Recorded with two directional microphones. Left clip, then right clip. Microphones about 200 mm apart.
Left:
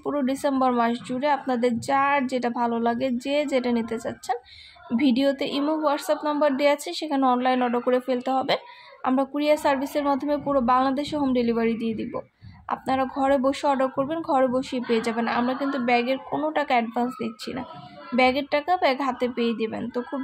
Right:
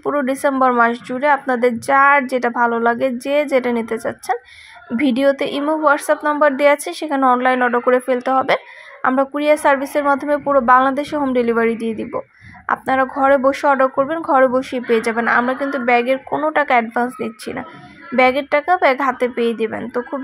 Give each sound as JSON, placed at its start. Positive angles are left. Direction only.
{"t": 0.0, "sound": "a woman's voice", "side_deg": -10}